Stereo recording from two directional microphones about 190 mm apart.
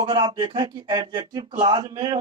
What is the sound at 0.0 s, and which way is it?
A man's voice, 25° right (ahead or behind).